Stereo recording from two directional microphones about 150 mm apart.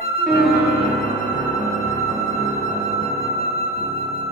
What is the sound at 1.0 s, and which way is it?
Music, 50° right (ahead or behind).